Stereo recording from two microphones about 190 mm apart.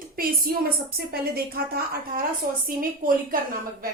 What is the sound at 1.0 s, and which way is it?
A woman's voice, 55° right (ahead or behind).